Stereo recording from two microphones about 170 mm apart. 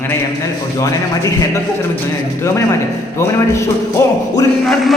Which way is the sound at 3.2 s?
15° left (ahead or behind).